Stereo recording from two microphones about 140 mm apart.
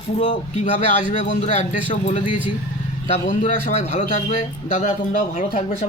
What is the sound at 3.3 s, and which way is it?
Speech, 65° left (ahead or behind).